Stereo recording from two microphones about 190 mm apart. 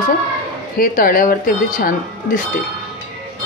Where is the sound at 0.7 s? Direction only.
50° left (ahead or behind).